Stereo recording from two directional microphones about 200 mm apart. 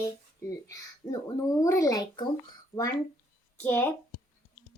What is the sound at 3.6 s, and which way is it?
Speech, 10° left (ahead or behind).